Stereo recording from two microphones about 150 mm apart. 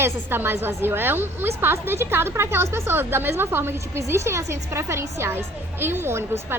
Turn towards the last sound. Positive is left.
turn(degrees=-15)  # may be behind; listen again after turning